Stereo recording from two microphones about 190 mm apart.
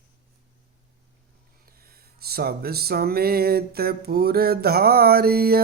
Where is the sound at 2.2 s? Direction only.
55° right (ahead or behind).